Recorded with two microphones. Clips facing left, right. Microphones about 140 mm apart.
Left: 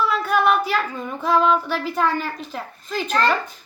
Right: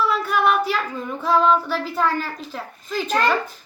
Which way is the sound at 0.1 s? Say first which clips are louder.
Left 1 dB; centre (ahead or behind).